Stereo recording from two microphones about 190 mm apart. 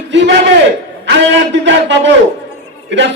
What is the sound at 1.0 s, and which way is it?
A man's voice, 70° right (ahead or behind).